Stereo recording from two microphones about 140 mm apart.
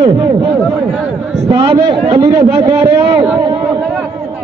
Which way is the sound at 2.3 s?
25° right (ahead or behind).